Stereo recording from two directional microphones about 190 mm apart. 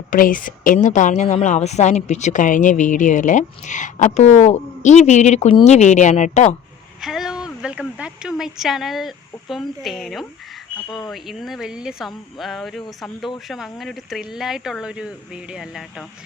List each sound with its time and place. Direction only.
0.1 s a woman's voice: 45° left (ahead or behind)
7.0 s speech: centre (ahead or behind)